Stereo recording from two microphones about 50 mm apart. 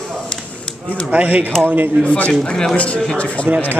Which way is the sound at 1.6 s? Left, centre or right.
Right.